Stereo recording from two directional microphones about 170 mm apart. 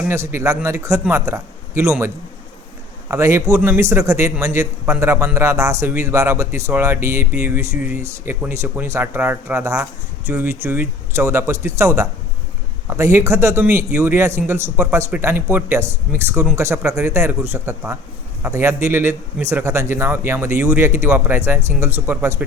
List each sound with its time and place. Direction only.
0.0 s a man's voice: 15° right (ahead or behind)